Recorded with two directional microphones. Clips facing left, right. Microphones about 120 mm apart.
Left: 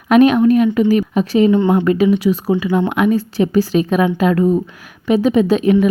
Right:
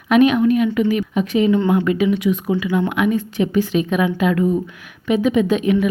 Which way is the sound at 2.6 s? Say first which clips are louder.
Left 3 dB; 45° left (ahead or behind).